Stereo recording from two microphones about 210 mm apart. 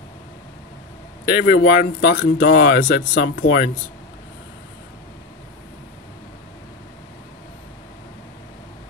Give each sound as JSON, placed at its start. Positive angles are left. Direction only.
{"t": 1.3, "sound": "speech", "side_deg": 50}